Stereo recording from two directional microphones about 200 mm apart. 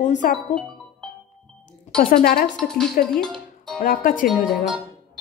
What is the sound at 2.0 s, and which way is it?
Speech, 50° left (ahead or behind).